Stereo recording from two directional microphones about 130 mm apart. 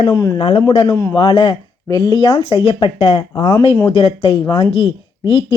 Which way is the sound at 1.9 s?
30° left (ahead or behind).